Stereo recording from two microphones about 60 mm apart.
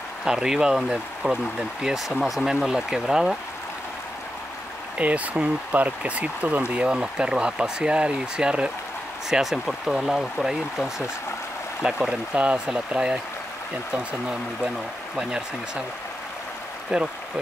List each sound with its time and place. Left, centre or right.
0.2 s speech: centre
4.9 s speech: right
9.3 s speech: centre
15.1 s speech: centre
16.9 s speech: centre